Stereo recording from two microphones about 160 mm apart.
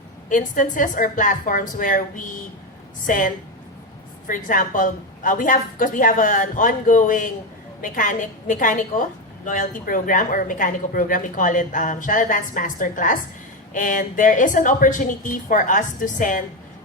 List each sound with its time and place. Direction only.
0.3 s a woman's voice: 55° left (ahead or behind)